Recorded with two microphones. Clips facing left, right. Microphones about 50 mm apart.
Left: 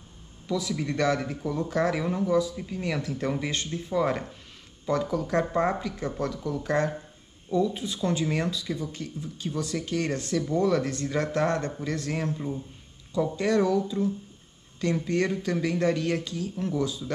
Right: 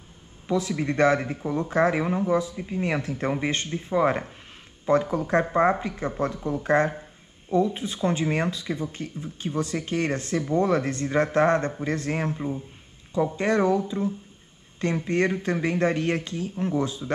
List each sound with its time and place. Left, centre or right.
0.5 s speech: right